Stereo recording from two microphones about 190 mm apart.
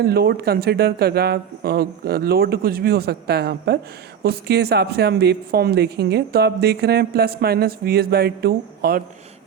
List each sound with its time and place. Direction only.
0.0 s a woman's voice: 55° right (ahead or behind)